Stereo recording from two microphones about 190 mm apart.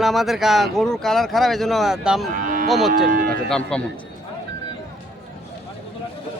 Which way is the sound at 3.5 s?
5° left (ahead or behind).